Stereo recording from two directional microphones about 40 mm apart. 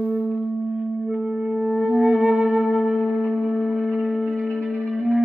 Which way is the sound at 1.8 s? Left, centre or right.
Right.